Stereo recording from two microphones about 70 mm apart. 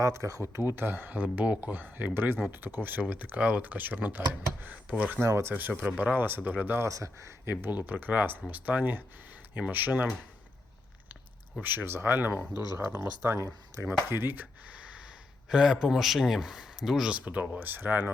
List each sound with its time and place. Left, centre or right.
0.0 s speech: right
0.5 s speech: right; by 5.2 s centre
5.2 s speech: right
5.5 s speech: right
6.7 s speech: right
7.5 s speech: right
11.6 s speech: right
13.3 s speech: right
13.8 s speech: right
15.4 s a man's voice: centre
17.1 s speech: centre